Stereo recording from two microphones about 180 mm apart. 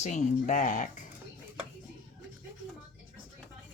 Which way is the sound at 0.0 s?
40° left (ahead or behind).